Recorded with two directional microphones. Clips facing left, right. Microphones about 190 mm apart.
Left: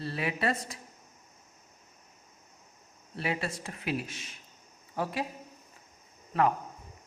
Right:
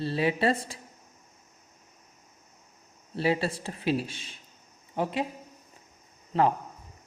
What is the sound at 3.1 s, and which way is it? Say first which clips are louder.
A man's voice: right 7 dB; 30° right (ahead or behind).